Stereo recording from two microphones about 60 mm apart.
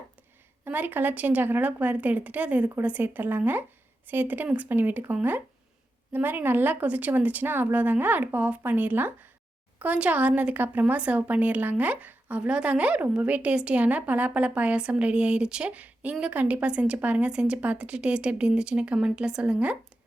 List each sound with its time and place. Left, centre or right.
0.6 s a woman's voice: right
6.1 s a woman's voice: right